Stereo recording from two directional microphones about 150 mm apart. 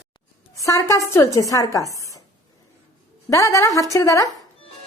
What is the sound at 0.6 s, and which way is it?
A woman's voice, 20° left (ahead or behind).